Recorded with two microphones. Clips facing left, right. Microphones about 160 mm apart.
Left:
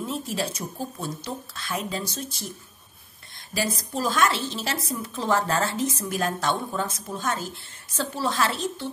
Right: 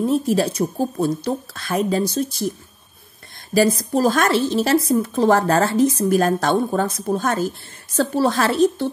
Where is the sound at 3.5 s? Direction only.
50° right (ahead or behind).